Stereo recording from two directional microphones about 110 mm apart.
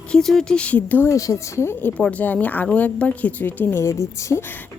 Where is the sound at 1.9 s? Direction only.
10° left (ahead or behind).